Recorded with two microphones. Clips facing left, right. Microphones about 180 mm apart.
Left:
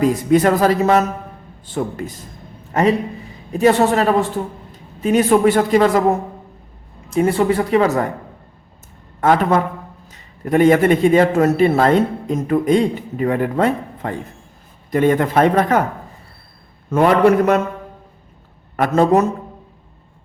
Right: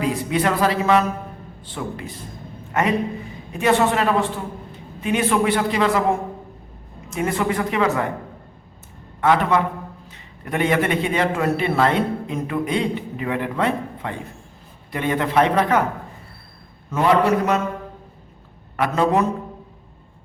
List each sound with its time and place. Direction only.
0.0 s speech: 45° left (ahead or behind)
3.5 s a man's voice: 40° left (ahead or behind)
7.1 s a man's voice: 30° left (ahead or behind)
9.2 s a man's voice: 45° left (ahead or behind)
16.9 s speech: 55° left (ahead or behind)
18.8 s speech: 45° left (ahead or behind)